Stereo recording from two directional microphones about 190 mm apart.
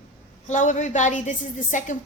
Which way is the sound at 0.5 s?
40° left (ahead or behind).